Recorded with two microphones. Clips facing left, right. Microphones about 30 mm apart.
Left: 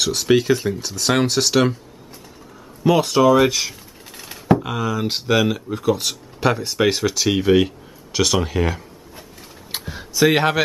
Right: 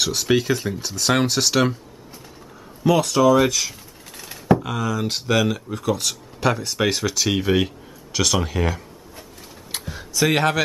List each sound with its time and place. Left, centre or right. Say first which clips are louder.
0.0 s speech: left 3 dB; centre
2.8 s speech: left 2 dB; centre
9.7 s a sound: left 2 dB; centre